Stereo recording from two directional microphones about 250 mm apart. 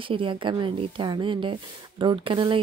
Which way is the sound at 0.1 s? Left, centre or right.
Right.